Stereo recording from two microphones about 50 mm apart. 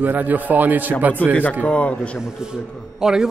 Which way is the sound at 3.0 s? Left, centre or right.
Centre.